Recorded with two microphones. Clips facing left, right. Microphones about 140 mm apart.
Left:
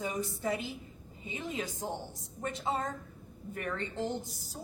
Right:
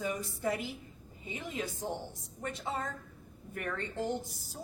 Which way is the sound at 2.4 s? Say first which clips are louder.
Left 3 dB; 20° left (ahead or behind).